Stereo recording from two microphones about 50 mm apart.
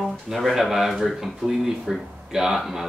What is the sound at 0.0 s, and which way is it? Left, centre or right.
Speech, centre.